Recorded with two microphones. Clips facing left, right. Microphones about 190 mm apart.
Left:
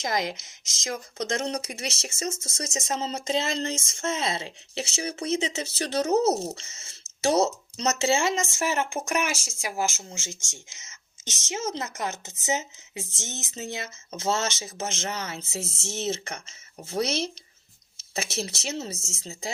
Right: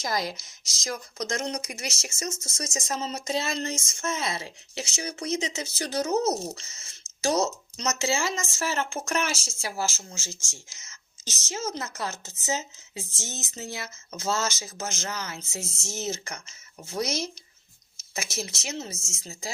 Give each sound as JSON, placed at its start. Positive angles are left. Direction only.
{"t": 0.0, "sound": "speech", "side_deg": 20}